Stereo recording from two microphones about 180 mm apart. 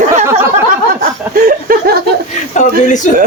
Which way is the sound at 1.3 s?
50° right (ahead or behind).